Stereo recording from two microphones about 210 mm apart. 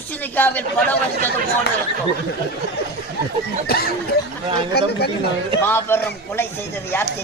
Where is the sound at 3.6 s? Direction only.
50° left (ahead or behind).